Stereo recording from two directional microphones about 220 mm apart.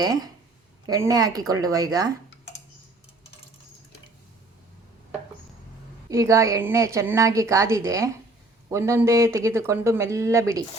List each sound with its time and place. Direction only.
0.0 s a woman's voice: 15° right (ahead or behind)
6.1 s a woman's voice: 15° right (ahead or behind)